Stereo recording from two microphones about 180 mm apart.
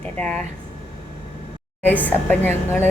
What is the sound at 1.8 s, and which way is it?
A woman's voice, 10° left (ahead or behind).